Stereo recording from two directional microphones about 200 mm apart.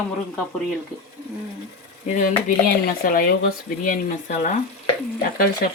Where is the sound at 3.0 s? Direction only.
45° left (ahead or behind).